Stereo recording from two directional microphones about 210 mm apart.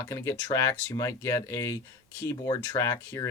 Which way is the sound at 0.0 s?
15° left (ahead or behind).